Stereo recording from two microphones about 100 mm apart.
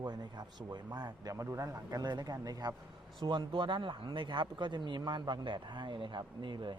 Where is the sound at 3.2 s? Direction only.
50° right (ahead or behind).